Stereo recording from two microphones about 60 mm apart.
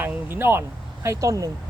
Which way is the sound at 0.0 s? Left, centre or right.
Right.